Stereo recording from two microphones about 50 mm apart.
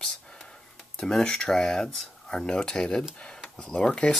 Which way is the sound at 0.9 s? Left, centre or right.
Centre.